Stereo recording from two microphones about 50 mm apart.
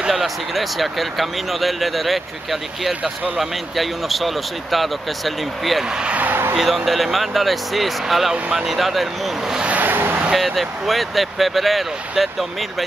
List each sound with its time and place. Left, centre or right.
0.1 s speech: centre
6.1 s a sound: right
6.5 s speech: centre
9.6 s vehicle: right
9.8 s vehicle: right
10.3 s speech: centre